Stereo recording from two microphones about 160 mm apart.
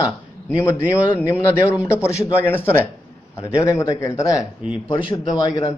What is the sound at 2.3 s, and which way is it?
A man's voice, 15° left (ahead or behind).